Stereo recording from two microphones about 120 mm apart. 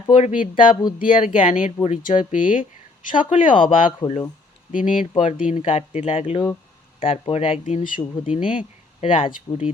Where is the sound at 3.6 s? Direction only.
50° left (ahead or behind).